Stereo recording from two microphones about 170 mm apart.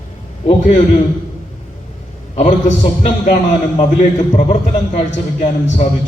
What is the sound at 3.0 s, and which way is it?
Speech, 50° left (ahead or behind).